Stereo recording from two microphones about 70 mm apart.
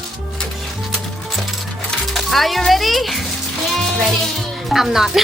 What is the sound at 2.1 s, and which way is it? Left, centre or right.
Speech, centre.